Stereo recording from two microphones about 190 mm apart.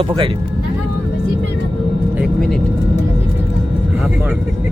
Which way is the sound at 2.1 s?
5° left (ahead or behind).